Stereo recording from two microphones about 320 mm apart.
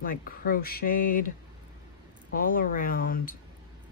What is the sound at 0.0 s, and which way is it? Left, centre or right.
Speech, left.